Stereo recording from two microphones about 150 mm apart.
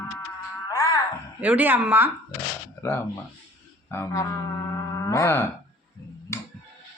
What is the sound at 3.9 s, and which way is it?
Speech, 20° left (ahead or behind).